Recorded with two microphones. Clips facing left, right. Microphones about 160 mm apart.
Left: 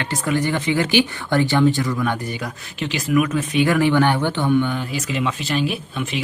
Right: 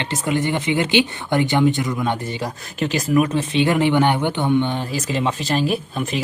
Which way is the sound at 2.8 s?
40° right (ahead or behind).